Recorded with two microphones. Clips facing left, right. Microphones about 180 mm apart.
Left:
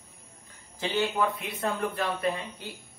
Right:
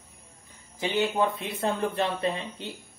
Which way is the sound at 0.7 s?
15° right (ahead or behind).